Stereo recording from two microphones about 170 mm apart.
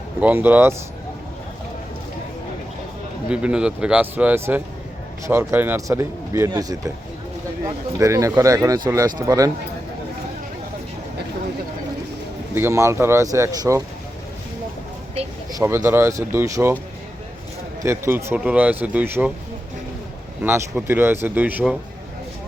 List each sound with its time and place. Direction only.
0.2 s speech: 10° right (ahead or behind)
3.2 s speech: 5° right (ahead or behind); by 6.9 s 20° right (ahead or behind)
7.9 s speech: 20° right (ahead or behind)
12.5 s speech: 15° right (ahead or behind)
15.5 s speech: 15° right (ahead or behind)
17.8 s speech: 15° right (ahead or behind)
20.4 s speech: 15° right (ahead or behind)